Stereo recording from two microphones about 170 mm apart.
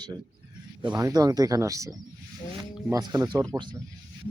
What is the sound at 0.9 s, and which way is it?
Speech, 20° right (ahead or behind).